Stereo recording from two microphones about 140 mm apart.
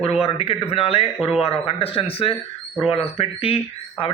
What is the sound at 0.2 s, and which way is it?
Speech, 45° left (ahead or behind).